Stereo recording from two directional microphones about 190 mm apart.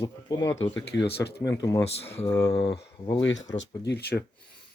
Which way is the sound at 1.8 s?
35° left (ahead or behind).